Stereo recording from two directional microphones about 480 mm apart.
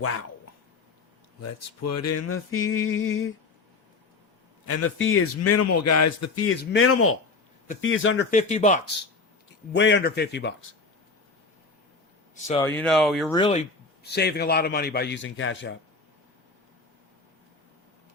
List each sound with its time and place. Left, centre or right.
0.0 s speech: left
1.4 s speech: left
4.6 s speech: left
12.5 s speech: centre; by 15.7 s left